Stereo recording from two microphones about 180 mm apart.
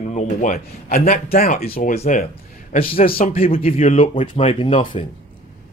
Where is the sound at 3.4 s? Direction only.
35° left (ahead or behind).